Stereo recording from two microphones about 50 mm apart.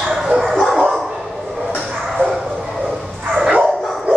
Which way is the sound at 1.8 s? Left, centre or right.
Centre.